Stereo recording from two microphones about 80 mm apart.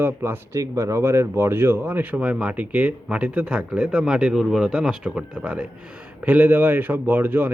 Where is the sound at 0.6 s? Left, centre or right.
Right.